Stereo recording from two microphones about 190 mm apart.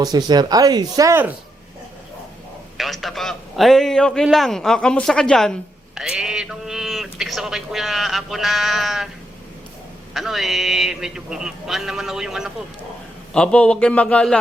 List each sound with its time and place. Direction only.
0.0 s speech: 20° right (ahead or behind)
2.7 s a man's voice: centre (ahead or behind)
10.2 s a man's voice: centre (ahead or behind)